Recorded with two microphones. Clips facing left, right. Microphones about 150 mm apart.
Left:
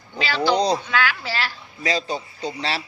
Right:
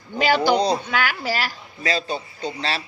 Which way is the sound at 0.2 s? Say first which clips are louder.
Right 2 dB; 45° right (ahead or behind).